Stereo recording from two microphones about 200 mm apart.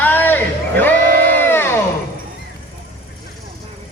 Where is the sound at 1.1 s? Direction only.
45° right (ahead or behind).